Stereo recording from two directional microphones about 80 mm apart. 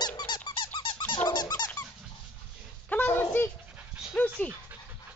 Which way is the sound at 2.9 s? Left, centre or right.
Left.